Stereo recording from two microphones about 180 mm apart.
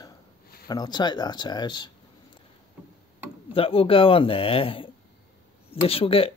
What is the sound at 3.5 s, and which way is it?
A man's voice, 30° left (ahead or behind).